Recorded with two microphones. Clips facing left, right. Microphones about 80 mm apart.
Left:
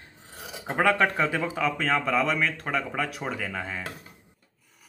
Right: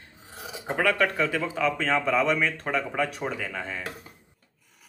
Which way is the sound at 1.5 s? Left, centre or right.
Centre.